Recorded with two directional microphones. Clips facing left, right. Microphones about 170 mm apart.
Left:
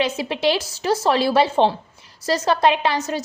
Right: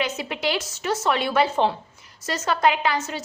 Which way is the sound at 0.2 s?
25° left (ahead or behind).